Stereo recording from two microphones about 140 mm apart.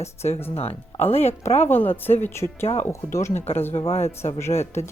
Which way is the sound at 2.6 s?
45° left (ahead or behind).